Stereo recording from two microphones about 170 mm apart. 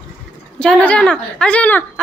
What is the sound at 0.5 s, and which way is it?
A woman's voice, 5° left (ahead or behind).